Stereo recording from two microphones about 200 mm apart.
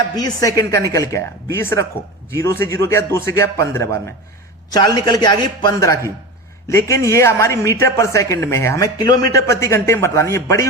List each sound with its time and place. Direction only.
0.2 s speech: 20° left (ahead or behind)
2.3 s a man's voice: 15° left (ahead or behind)